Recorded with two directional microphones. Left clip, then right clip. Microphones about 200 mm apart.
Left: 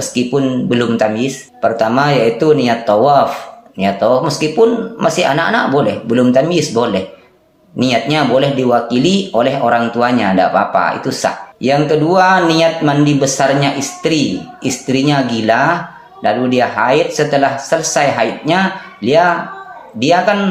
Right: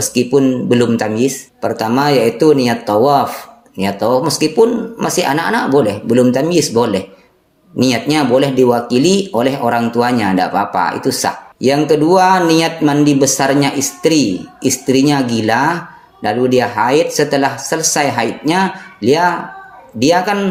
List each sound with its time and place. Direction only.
0.0 s speech: 45° right (ahead or behind)